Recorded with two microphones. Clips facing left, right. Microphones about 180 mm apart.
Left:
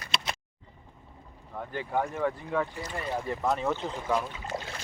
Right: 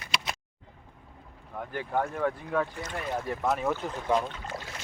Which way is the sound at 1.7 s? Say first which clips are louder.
Even; 15° left (ahead or behind).